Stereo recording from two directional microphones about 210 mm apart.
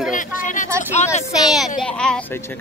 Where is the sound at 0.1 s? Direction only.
40° left (ahead or behind).